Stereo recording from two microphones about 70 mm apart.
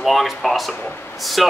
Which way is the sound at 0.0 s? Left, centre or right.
Centre.